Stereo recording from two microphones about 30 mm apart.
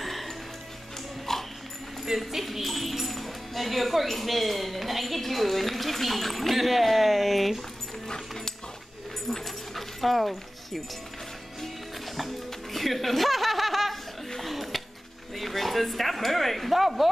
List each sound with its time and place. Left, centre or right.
0.0 s music: centre
1.3 s dog: centre
2.1 s speech: centre
9.3 s dog: centre
12.7 s chuckle: centre
14.4 s a sound: centre
15.3 s speech: centre